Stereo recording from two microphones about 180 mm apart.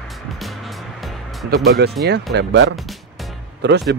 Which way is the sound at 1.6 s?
65° right (ahead or behind).